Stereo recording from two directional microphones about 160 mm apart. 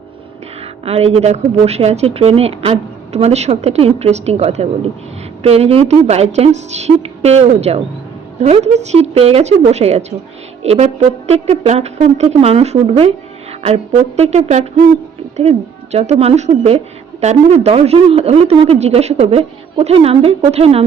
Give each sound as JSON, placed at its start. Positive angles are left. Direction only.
{"t": 0.9, "sound": "speech", "side_deg": -40}